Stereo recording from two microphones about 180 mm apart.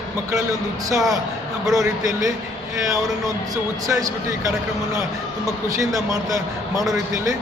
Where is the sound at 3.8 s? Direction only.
20° right (ahead or behind).